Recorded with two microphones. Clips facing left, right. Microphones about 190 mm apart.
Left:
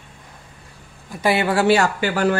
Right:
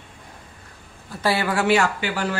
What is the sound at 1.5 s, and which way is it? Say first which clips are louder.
Speech: left 3 dB; 35° left (ahead or behind).